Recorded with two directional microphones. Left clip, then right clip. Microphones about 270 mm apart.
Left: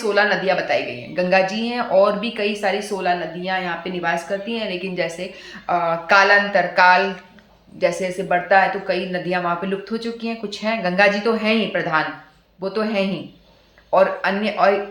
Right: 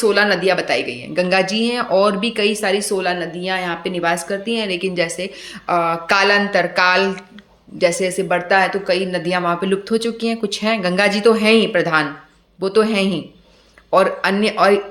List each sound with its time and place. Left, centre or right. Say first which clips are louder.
0.0 s speech: right 3 dB; right